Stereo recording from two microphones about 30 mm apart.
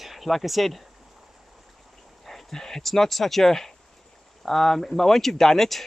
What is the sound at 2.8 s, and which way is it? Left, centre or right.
Speech, centre.